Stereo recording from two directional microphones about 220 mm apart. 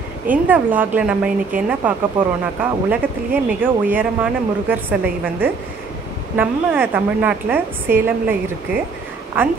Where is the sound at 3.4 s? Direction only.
10° right (ahead or behind).